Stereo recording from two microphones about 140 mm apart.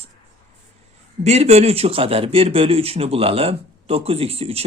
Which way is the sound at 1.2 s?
50° right (ahead or behind).